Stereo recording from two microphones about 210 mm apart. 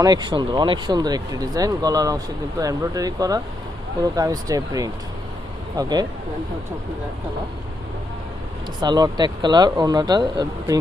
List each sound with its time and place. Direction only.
0.0 s speech: 20° right (ahead or behind)
8.8 s speech: 20° right (ahead or behind)